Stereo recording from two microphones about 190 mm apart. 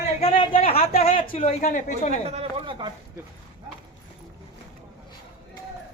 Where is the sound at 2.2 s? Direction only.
30° right (ahead or behind).